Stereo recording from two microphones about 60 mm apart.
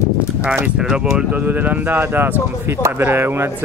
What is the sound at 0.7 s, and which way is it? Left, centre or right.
Speech, centre.